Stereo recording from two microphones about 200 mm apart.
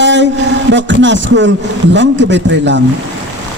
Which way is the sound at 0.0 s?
65° right (ahead or behind).